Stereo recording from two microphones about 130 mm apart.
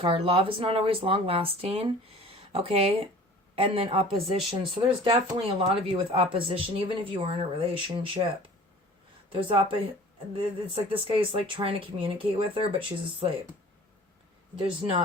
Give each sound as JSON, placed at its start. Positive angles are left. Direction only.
{"t": 0.0, "sound": "speech", "side_deg": -45}
{"t": 14.6, "sound": "speech", "side_deg": -40}